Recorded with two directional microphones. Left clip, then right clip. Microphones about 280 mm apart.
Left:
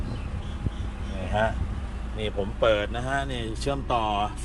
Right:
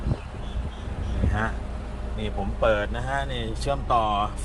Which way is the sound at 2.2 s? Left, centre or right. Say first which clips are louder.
Left 1 dB; centre.